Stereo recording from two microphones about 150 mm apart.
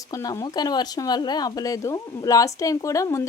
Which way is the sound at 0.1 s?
20° left (ahead or behind).